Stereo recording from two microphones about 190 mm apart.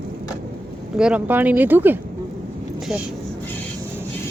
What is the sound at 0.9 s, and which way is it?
Speech, 5° right (ahead or behind).